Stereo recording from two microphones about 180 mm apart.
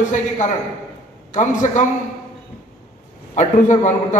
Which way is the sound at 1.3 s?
45° left (ahead or behind).